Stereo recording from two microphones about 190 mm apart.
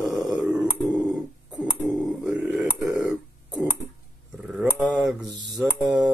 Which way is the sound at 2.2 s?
5° right (ahead or behind).